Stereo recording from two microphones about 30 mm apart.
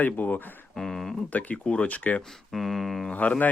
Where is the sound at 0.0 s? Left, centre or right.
Left.